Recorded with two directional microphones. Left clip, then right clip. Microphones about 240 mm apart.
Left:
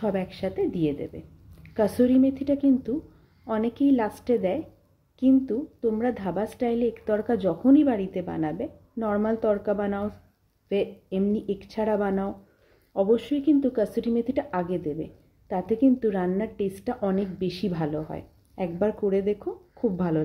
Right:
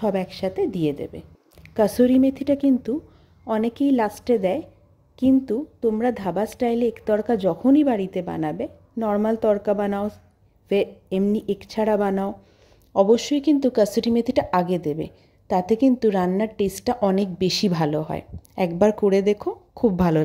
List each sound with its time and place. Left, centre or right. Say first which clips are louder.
0.0 s a woman's voice: right 4 dB; right